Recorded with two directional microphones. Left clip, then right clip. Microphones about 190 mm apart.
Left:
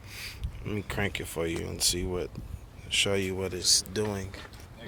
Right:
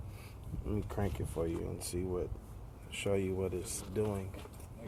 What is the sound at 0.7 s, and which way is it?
Speech, 15° left (ahead or behind).